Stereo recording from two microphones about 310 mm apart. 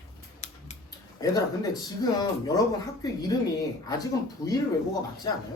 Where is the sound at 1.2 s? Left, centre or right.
Centre.